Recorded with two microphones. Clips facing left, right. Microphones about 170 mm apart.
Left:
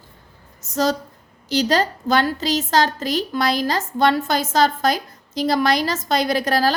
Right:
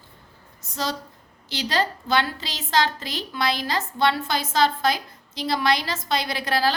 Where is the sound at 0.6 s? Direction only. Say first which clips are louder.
Left 8 dB; 45° left (ahead or behind).